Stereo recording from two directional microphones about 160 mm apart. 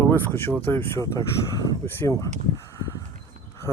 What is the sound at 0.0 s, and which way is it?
Speech, 15° left (ahead or behind).